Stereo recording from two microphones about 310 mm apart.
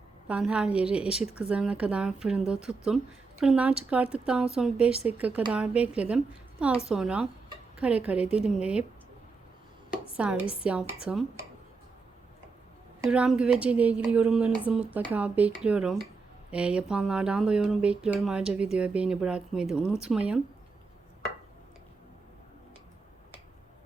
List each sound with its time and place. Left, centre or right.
0.3 s speech: centre
10.2 s speech: centre
13.0 s speech: centre